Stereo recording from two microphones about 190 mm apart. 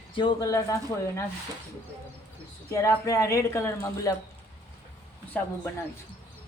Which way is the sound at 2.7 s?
15° left (ahead or behind).